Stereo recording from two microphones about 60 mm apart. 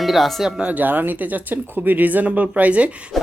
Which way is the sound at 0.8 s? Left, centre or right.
Right.